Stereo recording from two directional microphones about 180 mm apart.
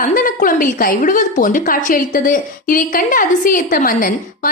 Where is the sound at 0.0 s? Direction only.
50° left (ahead or behind).